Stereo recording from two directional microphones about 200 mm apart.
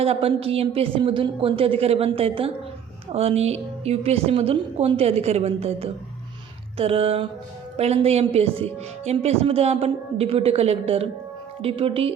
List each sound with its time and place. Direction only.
0.0 s a woman's voice: 30° right (ahead or behind)